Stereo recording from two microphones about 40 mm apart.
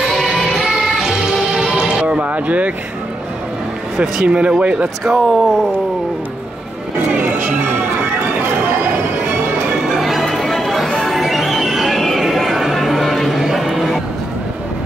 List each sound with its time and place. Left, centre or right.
0.1 s music: centre
1.3 s music: centre
2.0 s a sound: right
4.0 s speech: right
5.0 s speech: centre
9.9 s music: centre
11.0 s neigh: centre
13.4 s a sound: centre